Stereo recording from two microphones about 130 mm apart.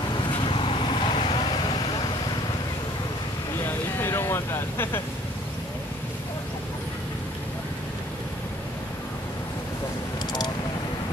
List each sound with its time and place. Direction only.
0.5 s vehicle: 40° left (ahead or behind)
3.5 s vehicle: 20° left (ahead or behind)